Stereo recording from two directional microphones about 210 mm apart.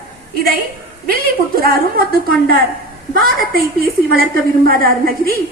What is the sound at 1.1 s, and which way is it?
A woman's voice, 45° right (ahead or behind).